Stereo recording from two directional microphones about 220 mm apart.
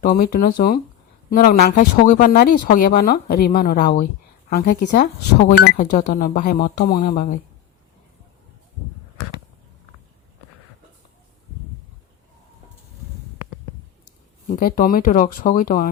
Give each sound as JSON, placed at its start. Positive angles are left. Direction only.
{"t": 0.0, "sound": "speech", "side_deg": 40}
{"t": 14.6, "sound": "speech", "side_deg": 40}